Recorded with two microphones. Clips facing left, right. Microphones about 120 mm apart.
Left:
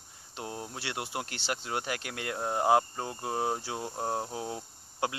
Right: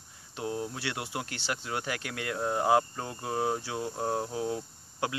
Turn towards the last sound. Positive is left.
turn(degrees=25)  # may be behind; listen again after turning